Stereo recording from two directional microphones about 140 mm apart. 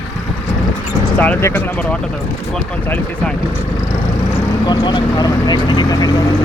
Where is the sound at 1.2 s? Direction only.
15° left (ahead or behind).